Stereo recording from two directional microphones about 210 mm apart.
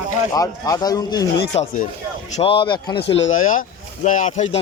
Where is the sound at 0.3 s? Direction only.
15° left (ahead or behind).